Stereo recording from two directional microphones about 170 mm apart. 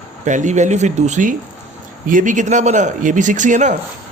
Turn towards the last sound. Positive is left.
turn(degrees=-45)  # may be behind; listen again after turning